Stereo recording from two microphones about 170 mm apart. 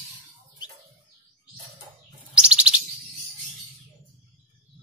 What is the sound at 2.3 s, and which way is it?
Chirp, 5° right (ahead or behind).